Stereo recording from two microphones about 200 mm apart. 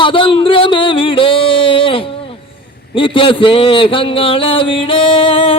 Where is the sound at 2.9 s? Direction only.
25° left (ahead or behind).